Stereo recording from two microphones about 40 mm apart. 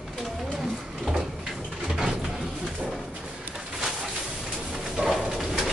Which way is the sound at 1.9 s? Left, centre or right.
Centre.